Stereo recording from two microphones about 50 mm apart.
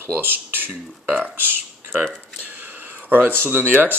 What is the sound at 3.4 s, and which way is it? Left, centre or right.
Speech, right.